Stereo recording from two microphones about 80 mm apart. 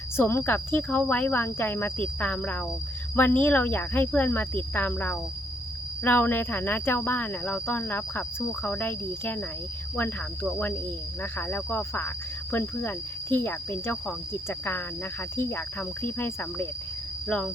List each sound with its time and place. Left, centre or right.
0.2 s speech: left
17.2 s speech: centre